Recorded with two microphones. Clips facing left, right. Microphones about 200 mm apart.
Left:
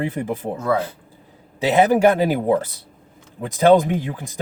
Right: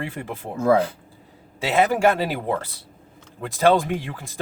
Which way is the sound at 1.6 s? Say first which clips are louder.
Left 4 dB; 20° left (ahead or behind).